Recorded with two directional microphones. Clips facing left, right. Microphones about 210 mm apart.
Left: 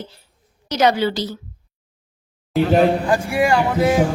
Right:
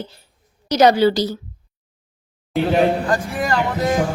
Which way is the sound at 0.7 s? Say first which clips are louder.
Right 4 dB; 40° right (ahead or behind).